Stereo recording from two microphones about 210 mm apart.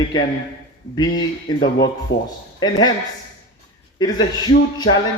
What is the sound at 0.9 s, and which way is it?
Speech, 20° left (ahead or behind).